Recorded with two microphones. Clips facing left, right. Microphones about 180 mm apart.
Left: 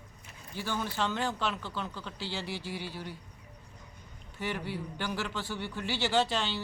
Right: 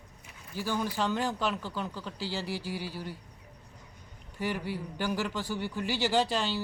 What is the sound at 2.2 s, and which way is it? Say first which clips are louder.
Speech: right 3 dB; 40° right (ahead or behind).